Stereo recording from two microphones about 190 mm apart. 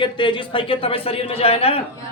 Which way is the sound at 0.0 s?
25° left (ahead or behind).